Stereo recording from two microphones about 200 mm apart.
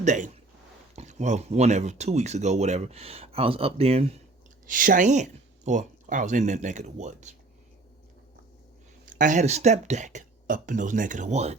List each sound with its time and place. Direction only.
0.0 s speech: 40° right (ahead or behind)
4.6 s speech: 45° right (ahead or behind)
9.0 s speech: 40° right (ahead or behind)